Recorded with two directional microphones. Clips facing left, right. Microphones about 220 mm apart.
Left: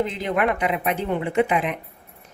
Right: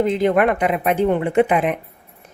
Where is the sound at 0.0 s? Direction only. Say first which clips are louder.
Right 7 dB; 50° right (ahead or behind).